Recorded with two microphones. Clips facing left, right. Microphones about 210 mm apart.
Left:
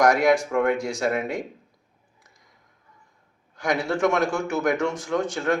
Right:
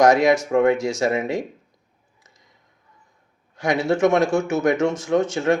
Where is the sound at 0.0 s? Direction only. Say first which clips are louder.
Right 3 dB; 25° right (ahead or behind).